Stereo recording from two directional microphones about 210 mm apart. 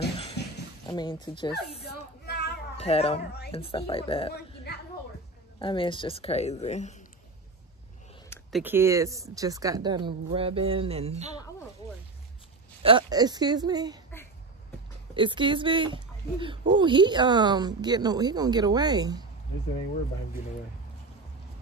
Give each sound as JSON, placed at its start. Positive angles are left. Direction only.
{"t": 0.8, "sound": "a woman's voice", "side_deg": 20}
{"t": 1.9, "sound": "a sound", "side_deg": 50}
{"t": 2.8, "sound": "a woman's voice", "side_deg": 30}
{"t": 5.6, "sound": "a woman's voice", "side_deg": 25}
{"t": 8.5, "sound": "speech", "side_deg": 0}
{"t": 8.7, "sound": "speech", "side_deg": -15}
{"t": 12.8, "sound": "speech", "side_deg": -20}
{"t": 15.1, "sound": "speech", "side_deg": -25}